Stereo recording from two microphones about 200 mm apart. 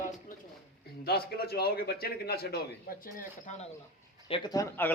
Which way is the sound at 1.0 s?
50° left (ahead or behind).